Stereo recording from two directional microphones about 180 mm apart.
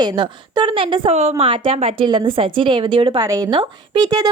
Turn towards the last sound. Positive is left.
turn(degrees=-20)  # may be behind; listen again after turning